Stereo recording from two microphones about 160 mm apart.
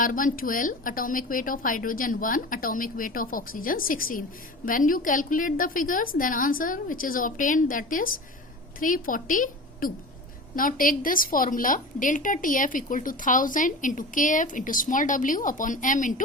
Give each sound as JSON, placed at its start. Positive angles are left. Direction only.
{"t": 0.0, "sound": "a woman's voice", "side_deg": 55}